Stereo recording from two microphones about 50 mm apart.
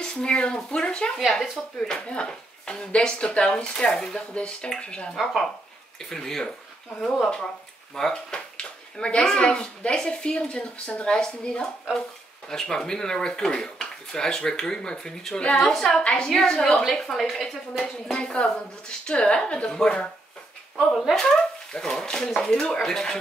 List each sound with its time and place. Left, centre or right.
0.0 s speech: centre
1.1 s speech: centre
1.9 s speech: left
7.9 s speech: centre
16.0 s speech: left
16.3 s speech: centre
16.5 s speech: centre
16.9 s speech: centre
18.2 s speech: left
21.7 s speech: centre